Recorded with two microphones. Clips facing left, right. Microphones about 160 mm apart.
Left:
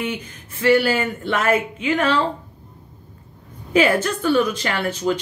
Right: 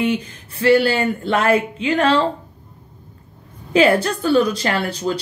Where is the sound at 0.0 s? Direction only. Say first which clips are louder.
Right 7 dB; 35° right (ahead or behind).